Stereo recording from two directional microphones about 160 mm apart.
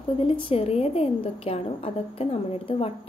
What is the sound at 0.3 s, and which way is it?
A woman's voice, 35° left (ahead or behind).